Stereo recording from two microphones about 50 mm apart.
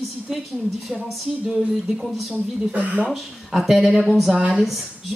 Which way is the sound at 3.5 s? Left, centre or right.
Centre.